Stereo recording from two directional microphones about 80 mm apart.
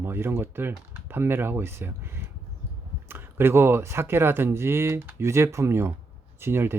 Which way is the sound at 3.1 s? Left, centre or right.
Right.